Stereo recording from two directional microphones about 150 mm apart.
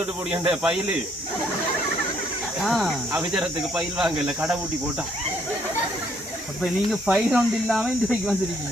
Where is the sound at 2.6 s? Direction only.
Centre (ahead or behind).